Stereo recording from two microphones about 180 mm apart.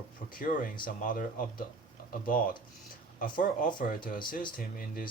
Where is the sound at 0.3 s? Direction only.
50° left (ahead or behind).